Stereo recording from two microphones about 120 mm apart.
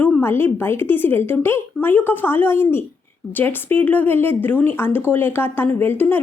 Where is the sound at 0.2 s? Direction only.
20° left (ahead or behind).